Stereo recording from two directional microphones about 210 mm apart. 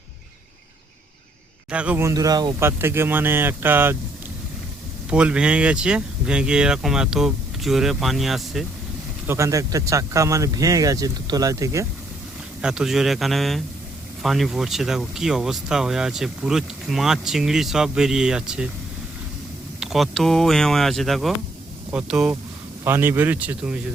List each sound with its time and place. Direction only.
1.7 s speech: 5° right (ahead or behind)
5.1 s speech: 5° right (ahead or behind)
9.2 s speech: 15° right (ahead or behind)
12.6 s speech: 5° right (ahead or behind)
19.8 s speech: centre (ahead or behind)